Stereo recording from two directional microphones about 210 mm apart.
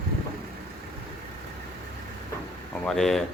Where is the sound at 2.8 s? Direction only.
Centre (ahead or behind).